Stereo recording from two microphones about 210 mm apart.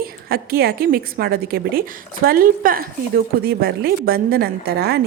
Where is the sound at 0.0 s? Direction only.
45° right (ahead or behind).